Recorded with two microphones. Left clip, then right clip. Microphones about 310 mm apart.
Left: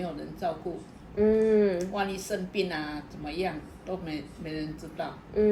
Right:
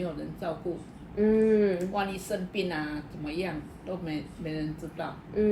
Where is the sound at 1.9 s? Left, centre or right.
Centre.